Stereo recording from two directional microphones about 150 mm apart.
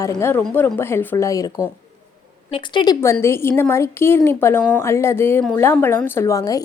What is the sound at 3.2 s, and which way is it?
A woman's voice, 15° left (ahead or behind).